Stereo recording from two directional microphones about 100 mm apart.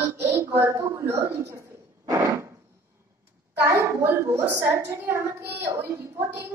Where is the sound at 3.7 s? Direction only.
30° right (ahead or behind).